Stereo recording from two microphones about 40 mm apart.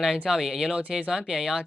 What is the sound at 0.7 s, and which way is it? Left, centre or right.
Speech, right.